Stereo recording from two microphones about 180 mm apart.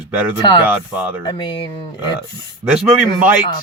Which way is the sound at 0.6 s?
10° right (ahead or behind).